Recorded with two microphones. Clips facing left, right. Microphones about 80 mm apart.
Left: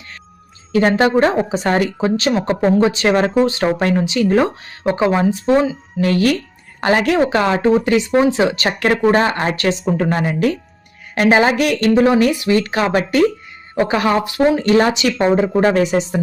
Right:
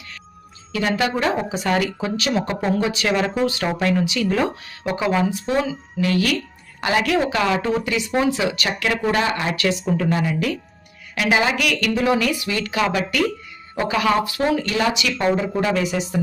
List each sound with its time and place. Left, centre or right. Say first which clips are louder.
0.7 s speech: left 8 dB; left